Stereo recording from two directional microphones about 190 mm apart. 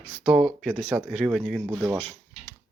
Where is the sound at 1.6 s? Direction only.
10° right (ahead or behind).